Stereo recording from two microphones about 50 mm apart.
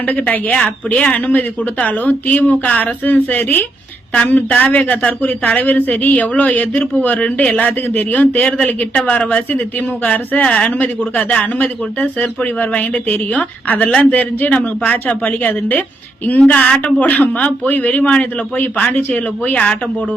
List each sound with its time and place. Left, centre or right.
0.0 s speech: left
7.3 s speech: left
8.2 s speech: left
10.7 s speech: left
12.5 s speech: left